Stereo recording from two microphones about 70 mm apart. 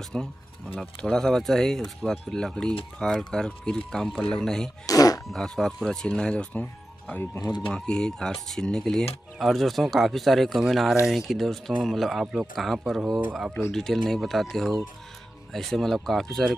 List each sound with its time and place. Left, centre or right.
0.1 s speech: centre
4.8 s throat clearing: left
5.3 s speech: centre
7.7 s speech: centre